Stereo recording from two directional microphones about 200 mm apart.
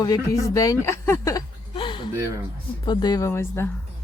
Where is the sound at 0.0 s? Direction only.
20° left (ahead or behind).